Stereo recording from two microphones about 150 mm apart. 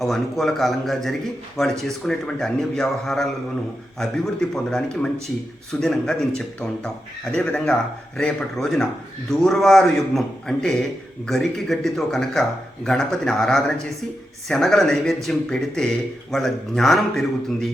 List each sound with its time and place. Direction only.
0.0 s speech: centre (ahead or behind)